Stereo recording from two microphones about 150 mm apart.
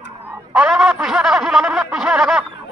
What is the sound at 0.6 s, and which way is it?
Snicker, 5° right (ahead or behind).